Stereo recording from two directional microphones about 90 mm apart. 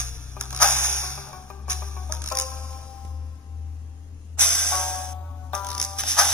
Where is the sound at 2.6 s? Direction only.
10° left (ahead or behind).